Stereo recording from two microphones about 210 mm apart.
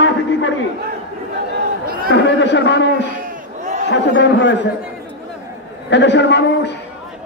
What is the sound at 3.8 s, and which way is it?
Speech, 60° left (ahead or behind).